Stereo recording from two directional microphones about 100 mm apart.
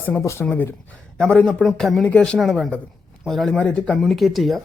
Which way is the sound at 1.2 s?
10° left (ahead or behind).